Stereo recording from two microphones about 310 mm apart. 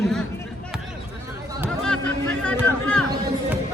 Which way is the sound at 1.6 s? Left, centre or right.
Centre.